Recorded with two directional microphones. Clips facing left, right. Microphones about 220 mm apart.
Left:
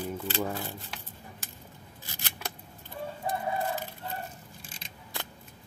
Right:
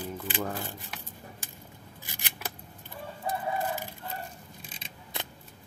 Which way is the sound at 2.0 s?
15° right (ahead or behind).